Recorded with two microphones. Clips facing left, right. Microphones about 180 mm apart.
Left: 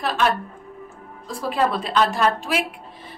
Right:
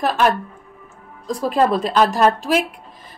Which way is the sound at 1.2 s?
40° right (ahead or behind).